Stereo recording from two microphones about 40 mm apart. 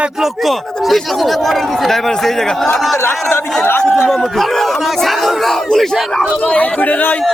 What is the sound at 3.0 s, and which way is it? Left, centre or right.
Speech, left.